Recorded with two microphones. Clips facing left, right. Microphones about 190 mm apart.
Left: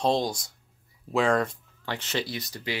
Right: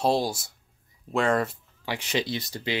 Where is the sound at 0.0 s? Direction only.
10° right (ahead or behind).